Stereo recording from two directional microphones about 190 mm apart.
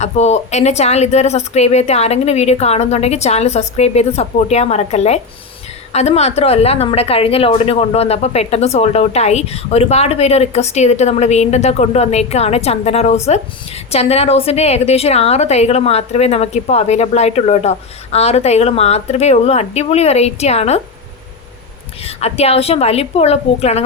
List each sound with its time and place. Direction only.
0.0 s a woman's voice: 35° left (ahead or behind)
22.0 s a woman's voice: 35° left (ahead or behind)